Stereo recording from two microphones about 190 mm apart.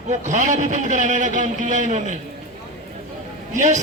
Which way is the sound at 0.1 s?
40° right (ahead or behind).